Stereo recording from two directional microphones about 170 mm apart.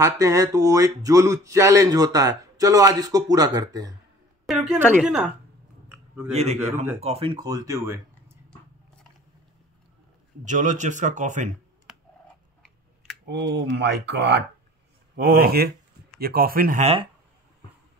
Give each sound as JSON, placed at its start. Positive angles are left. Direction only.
{"t": 0.0, "sound": "speech", "side_deg": -20}
{"t": 4.5, "sound": "a woman's voice", "side_deg": 0}
{"t": 5.9, "sound": "a sound", "side_deg": -10}
{"t": 6.3, "sound": "a man's voice", "side_deg": -40}
{"t": 10.4, "sound": "speech", "side_deg": -45}
{"t": 13.2, "sound": "speech", "side_deg": -75}
{"t": 15.1, "sound": "speech", "side_deg": -65}
{"t": 16.8, "sound": "a man's voice", "side_deg": -35}